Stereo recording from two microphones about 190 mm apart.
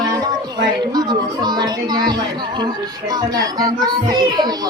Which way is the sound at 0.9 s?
20° right (ahead or behind).